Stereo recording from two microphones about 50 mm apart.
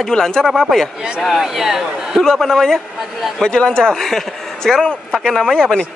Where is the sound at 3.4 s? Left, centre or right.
Centre.